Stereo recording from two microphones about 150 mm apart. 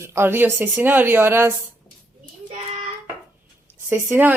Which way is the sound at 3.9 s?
15° right (ahead or behind).